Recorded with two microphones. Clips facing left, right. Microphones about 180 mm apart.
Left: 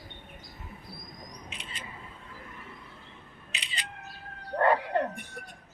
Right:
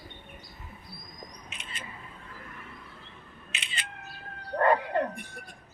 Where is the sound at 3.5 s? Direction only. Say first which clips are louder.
Even; 35° left (ahead or behind).